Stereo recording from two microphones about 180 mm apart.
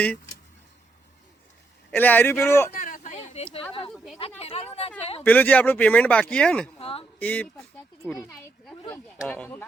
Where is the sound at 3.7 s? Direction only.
30° left (ahead or behind).